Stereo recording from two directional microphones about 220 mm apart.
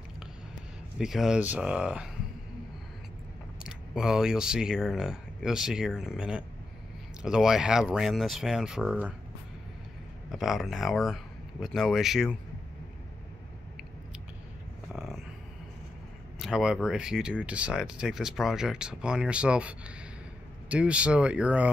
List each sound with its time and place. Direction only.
0.9 s speech: centre (ahead or behind)
3.6 s speech: 5° right (ahead or behind)
10.3 s speech: centre (ahead or behind)
14.9 s a sound: centre (ahead or behind)
16.3 s speech: centre (ahead or behind)